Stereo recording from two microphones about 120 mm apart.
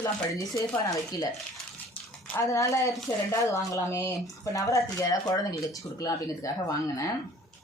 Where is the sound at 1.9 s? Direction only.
10° left (ahead or behind).